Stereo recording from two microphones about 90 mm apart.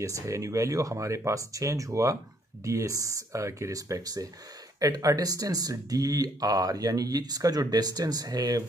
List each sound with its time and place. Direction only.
0.0 s speech: 40° right (ahead or behind)